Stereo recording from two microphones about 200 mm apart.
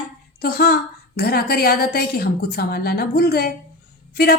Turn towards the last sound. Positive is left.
turn(degrees=50)  # may be behind; listen again after turning